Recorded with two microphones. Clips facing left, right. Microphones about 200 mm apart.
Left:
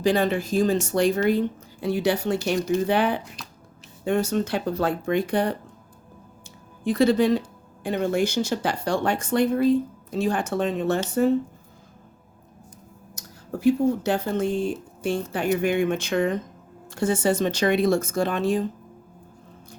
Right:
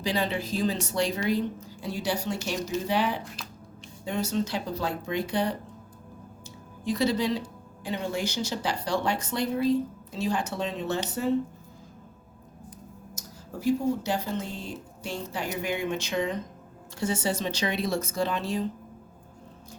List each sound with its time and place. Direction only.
0.0 s speech: 50° left (ahead or behind)
3.4 s a sound: centre (ahead or behind)
4.0 s speech: 55° left (ahead or behind)
6.8 s speech: 55° left (ahead or behind)
13.1 s speech: 60° left (ahead or behind)